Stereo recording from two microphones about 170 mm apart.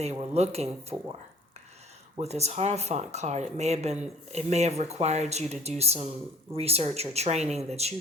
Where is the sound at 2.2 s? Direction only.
40° right (ahead or behind).